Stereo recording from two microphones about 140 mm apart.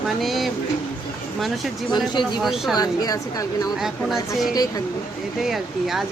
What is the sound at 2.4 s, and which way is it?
Speech, centre (ahead or behind).